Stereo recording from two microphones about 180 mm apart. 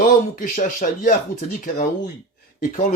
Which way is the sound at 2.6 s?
50° left (ahead or behind).